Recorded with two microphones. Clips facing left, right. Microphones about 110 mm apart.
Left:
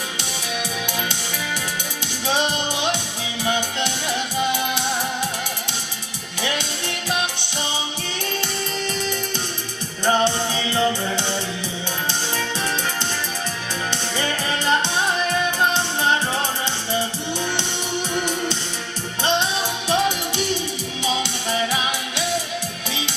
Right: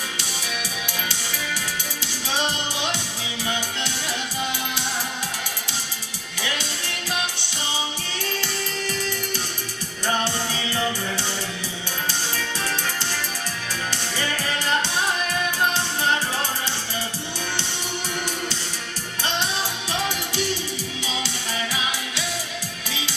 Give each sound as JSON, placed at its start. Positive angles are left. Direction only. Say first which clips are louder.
{"t": 2.2, "sound": "music", "louder": "left 4 dB", "side_deg": 20}
{"t": 8.9, "sound": "music", "louder": "left 2 dB", "side_deg": 20}
{"t": 13.9, "sound": "music", "louder": "left 3 dB", "side_deg": 20}
{"t": 18.1, "sound": "music", "louder": "left 6 dB", "side_deg": 20}